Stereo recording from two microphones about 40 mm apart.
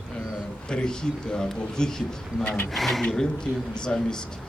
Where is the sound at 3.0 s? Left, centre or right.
Centre.